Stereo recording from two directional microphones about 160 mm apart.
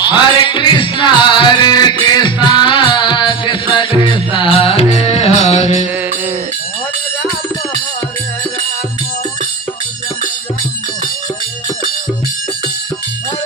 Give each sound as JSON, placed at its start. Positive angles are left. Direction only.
{"t": 0.0, "sound": "music", "side_deg": 30}